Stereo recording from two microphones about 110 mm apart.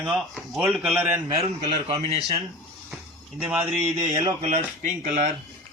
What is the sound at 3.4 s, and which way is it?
Speech, 10° right (ahead or behind).